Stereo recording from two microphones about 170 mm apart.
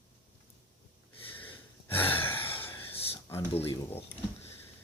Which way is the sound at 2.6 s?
10° left (ahead or behind).